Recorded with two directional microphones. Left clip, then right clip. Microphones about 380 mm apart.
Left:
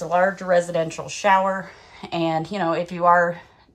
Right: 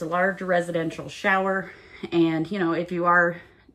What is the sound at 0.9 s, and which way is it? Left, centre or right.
Speech, centre.